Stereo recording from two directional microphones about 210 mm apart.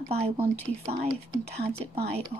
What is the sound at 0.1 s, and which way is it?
A woman's voice, 30° right (ahead or behind).